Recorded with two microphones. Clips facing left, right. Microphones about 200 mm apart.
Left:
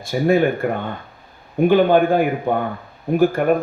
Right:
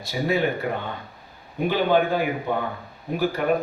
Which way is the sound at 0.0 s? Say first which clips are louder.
Left 7 dB; 50° left (ahead or behind).